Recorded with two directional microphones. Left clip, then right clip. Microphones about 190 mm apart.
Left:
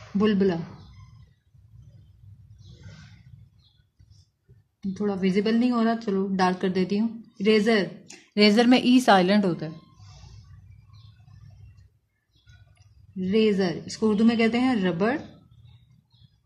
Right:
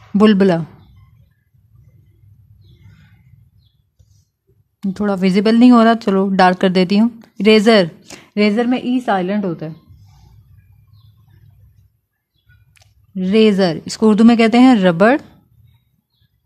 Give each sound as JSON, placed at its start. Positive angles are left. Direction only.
{"t": 0.2, "sound": "speech", "side_deg": -50}
{"t": 4.7, "sound": "speech", "side_deg": -50}
{"t": 8.5, "sound": "a woman's voice", "side_deg": -5}
{"t": 12.7, "sound": "speech", "side_deg": -50}